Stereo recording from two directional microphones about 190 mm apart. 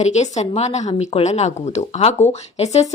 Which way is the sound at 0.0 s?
35° left (ahead or behind).